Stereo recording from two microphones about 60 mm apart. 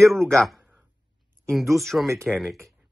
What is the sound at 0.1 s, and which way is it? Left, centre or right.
Speech, centre.